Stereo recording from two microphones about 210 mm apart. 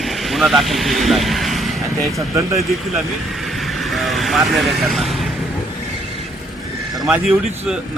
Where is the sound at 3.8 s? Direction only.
Centre (ahead or behind).